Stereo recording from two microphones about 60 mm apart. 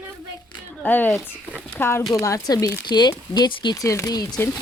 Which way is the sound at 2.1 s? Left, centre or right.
Left.